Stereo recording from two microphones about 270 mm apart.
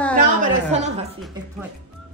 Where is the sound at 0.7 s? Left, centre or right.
Right.